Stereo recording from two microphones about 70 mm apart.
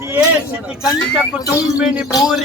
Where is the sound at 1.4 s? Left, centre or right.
Left.